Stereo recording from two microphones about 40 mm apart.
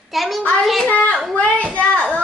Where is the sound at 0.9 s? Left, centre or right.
Left.